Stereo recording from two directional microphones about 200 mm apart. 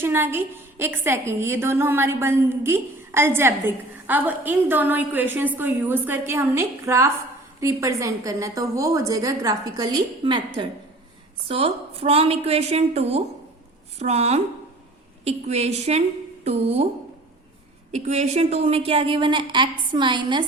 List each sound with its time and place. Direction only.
0.0 s a woman's voice: 10° right (ahead or behind)
11.4 s a woman's voice: 30° right (ahead or behind)
17.9 s a woman's voice: 35° right (ahead or behind)